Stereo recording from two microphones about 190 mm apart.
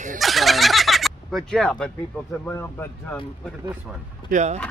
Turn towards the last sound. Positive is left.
turn(degrees=-40)  # may be behind; listen again after turning